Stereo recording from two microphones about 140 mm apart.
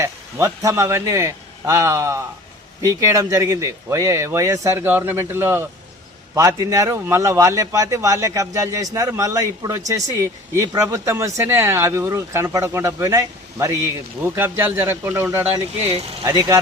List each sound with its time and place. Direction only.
0.0 s a man's voice: 20° right (ahead or behind)